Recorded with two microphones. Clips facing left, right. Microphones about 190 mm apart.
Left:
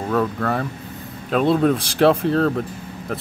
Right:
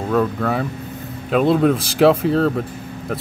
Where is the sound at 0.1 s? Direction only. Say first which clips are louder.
Right 2 dB; centre (ahead or behind).